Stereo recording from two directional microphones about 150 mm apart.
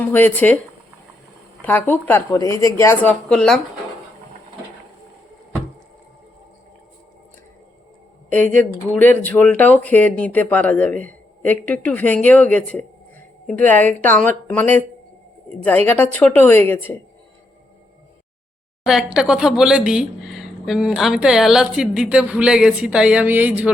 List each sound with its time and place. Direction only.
0.0 s speech: 10° left (ahead or behind)
1.6 s speech: 10° left (ahead or behind)
3.2 s speech: centre (ahead or behind)
8.3 s speech: 10° left (ahead or behind)
16.1 s speech: 10° left (ahead or behind)
18.9 s speech: 5° right (ahead or behind)